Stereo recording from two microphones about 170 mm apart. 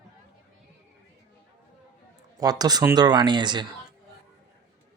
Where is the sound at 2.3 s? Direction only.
20° right (ahead or behind).